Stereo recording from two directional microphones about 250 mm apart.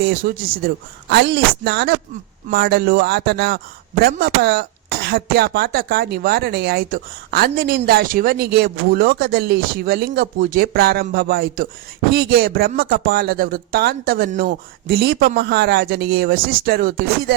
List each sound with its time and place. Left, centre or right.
0.0 s a man's voice: right